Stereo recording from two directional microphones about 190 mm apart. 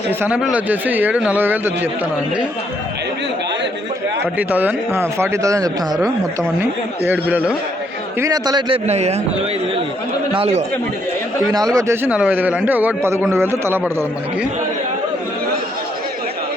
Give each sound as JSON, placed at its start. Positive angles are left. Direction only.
{"t": 0.2, "sound": "speech", "side_deg": -5}
{"t": 4.4, "sound": "speech", "side_deg": -10}
{"t": 8.2, "sound": "a man's voice", "side_deg": -20}
{"t": 10.3, "sound": "speech", "side_deg": -30}
{"t": 11.5, "sound": "speech", "side_deg": -20}